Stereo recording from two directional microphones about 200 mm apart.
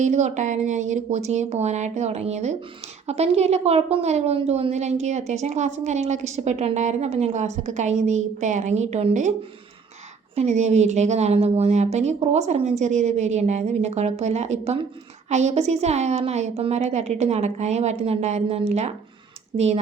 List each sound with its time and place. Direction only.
0.0 s a woman's voice: 35° right (ahead or behind)
10.3 s a woman's voice: 35° right (ahead or behind)